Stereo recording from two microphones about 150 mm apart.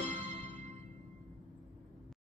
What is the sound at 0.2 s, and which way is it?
Music, 45° right (ahead or behind).